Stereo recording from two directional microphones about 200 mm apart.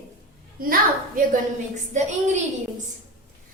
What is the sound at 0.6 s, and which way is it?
Speech, 45° right (ahead or behind).